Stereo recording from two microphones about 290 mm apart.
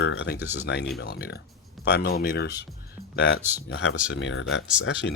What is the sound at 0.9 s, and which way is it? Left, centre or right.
Speech, left.